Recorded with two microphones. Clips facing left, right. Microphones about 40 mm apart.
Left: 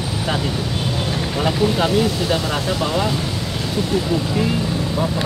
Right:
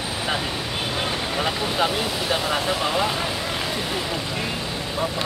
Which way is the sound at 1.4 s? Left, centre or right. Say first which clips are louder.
Left 6 dB; centre.